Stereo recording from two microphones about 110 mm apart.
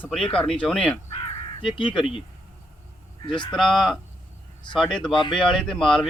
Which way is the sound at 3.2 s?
45° left (ahead or behind).